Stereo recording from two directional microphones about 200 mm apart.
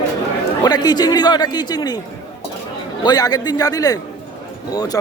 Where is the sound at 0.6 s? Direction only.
20° left (ahead or behind).